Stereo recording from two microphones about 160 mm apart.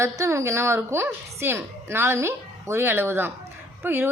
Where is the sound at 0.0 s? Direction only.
20° right (ahead or behind).